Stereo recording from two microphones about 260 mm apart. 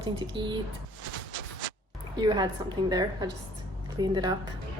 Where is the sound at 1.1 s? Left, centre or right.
Left.